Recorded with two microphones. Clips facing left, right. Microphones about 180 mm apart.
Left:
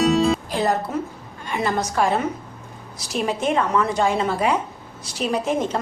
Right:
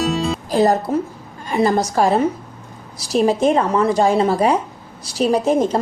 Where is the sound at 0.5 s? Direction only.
40° right (ahead or behind).